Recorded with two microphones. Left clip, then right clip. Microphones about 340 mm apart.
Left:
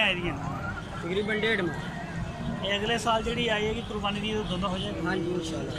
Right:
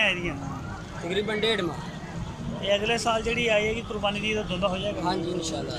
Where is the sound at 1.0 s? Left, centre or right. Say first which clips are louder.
Right 2 dB; centre.